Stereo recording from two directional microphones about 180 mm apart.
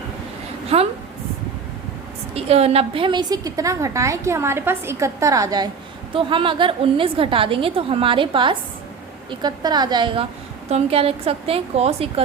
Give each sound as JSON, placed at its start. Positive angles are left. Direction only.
{"t": 0.7, "sound": "a woman's voice", "side_deg": -35}
{"t": 2.3, "sound": "a woman's voice", "side_deg": -35}